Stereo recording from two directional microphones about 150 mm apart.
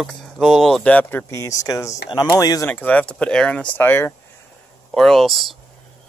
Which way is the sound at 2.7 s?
10° left (ahead or behind).